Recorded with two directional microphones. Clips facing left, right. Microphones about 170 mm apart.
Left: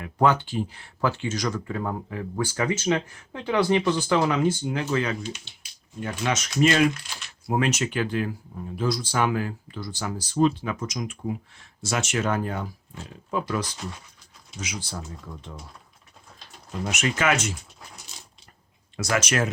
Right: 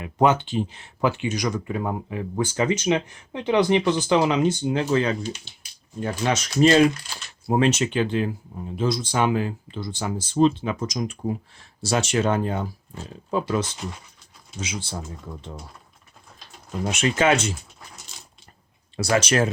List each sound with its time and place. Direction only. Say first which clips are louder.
0.0 s speech: right 2 dB; 20° right (ahead or behind)
16.8 s speech: right 4 dB; 30° right (ahead or behind)
18.9 s speech: right 4 dB; 30° right (ahead or behind)